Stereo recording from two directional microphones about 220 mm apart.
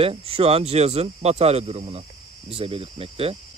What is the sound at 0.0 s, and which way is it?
Speech, 25° right (ahead or behind).